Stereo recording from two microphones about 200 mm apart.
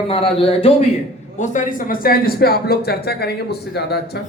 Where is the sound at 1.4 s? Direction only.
40° left (ahead or behind).